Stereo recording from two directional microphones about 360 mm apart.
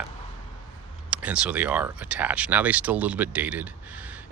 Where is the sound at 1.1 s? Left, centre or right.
Centre.